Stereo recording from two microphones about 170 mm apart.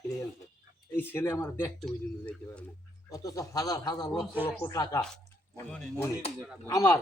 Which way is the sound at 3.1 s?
20° left (ahead or behind).